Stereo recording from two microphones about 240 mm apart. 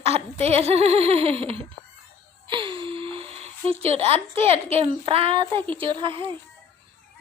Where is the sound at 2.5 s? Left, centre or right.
Right.